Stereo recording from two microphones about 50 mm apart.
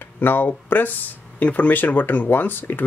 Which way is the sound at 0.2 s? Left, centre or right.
Left.